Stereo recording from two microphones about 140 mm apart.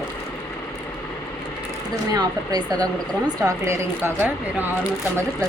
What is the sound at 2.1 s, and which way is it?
Speech, 30° right (ahead or behind).